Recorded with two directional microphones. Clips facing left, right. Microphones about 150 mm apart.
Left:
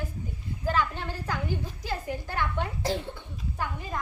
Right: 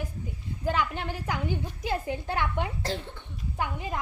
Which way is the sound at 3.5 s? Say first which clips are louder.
Right 3 dB; 20° right (ahead or behind).